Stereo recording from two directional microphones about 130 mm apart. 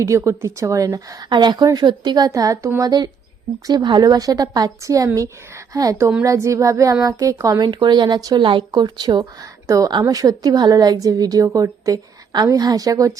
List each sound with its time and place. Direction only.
0.0 s speech: 25° right (ahead or behind)
3.7 s speech: 30° right (ahead or behind)